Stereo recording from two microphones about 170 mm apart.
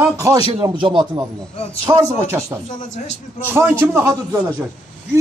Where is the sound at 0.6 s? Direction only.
30° right (ahead or behind).